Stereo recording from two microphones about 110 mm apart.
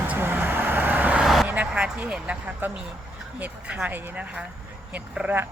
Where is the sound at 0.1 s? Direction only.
20° right (ahead or behind).